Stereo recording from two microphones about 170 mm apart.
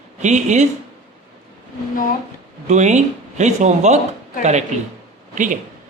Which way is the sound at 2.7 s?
45° right (ahead or behind).